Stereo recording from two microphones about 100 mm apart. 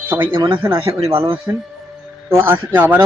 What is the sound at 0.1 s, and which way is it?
Speech, 20° right (ahead or behind).